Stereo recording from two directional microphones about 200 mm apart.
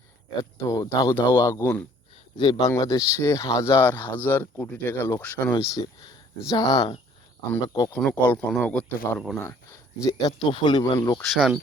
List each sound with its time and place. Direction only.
0.6 s speech: 15° left (ahead or behind)
10.0 s speech: 20° left (ahead or behind)
11.2 s speech: centre (ahead or behind)